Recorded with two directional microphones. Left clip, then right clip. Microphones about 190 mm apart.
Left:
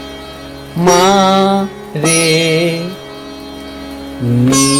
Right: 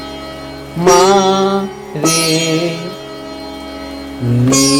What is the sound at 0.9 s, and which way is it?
Mantra, 15° left (ahead or behind).